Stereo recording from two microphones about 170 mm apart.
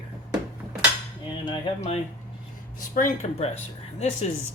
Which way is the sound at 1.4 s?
35° left (ahead or behind).